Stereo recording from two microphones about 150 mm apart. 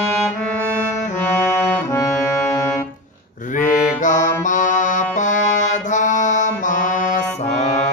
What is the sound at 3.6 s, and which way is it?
Music, 60° left (ahead or behind).